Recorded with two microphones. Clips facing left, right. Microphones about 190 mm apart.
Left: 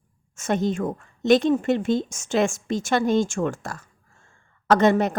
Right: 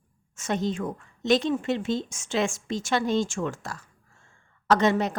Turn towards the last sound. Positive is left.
turn(degrees=50)  # may be behind; listen again after turning